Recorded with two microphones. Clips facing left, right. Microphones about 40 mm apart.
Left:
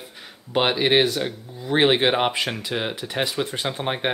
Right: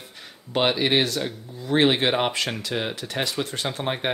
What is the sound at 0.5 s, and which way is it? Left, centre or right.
Speech, centre.